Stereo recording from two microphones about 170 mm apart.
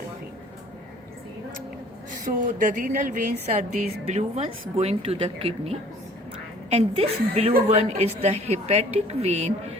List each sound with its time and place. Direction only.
2.2 s a woman's voice: 50° right (ahead or behind)